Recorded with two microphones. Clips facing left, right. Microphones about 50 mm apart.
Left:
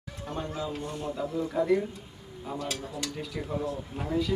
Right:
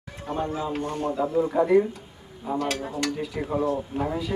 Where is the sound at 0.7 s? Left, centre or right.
Right.